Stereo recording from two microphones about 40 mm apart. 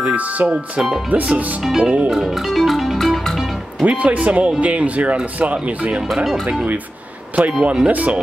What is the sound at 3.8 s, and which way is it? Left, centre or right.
Speech, right.